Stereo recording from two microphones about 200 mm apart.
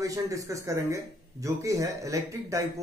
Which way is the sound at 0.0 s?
15° right (ahead or behind).